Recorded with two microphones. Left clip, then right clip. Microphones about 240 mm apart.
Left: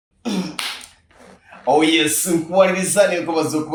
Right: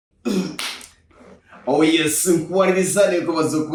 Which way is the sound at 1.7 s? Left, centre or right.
Left.